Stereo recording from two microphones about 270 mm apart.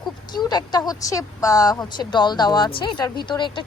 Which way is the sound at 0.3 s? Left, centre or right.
Centre.